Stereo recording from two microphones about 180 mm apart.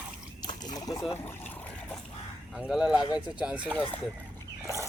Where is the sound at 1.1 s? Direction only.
10° left (ahead or behind).